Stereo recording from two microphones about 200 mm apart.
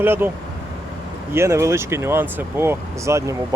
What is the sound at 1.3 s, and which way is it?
Speech, 15° right (ahead or behind).